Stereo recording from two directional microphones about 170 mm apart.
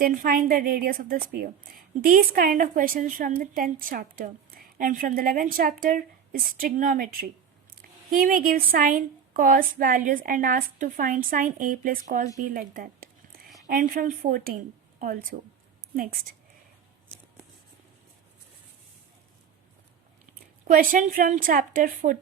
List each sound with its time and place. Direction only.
0.0 s a woman's voice: 55° right (ahead or behind)
20.7 s a woman's voice: 55° right (ahead or behind)